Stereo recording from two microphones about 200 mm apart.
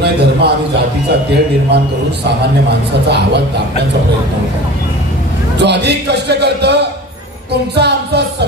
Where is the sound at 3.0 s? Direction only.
55° right (ahead or behind).